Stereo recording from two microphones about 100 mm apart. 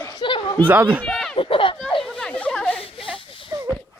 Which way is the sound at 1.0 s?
5° left (ahead or behind).